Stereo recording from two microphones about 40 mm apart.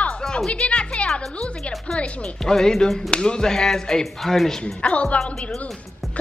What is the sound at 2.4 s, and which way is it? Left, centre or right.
Music, centre.